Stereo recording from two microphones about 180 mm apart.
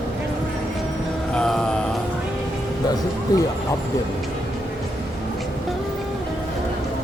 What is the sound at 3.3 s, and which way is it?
Speech, 20° left (ahead or behind).